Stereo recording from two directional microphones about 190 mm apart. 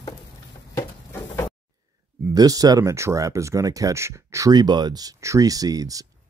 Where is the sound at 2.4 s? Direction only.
20° right (ahead or behind).